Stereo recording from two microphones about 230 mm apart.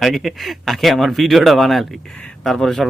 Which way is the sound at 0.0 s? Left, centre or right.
Centre.